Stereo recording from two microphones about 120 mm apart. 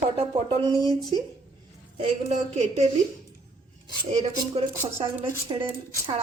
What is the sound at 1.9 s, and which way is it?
Speech, 70° right (ahead or behind).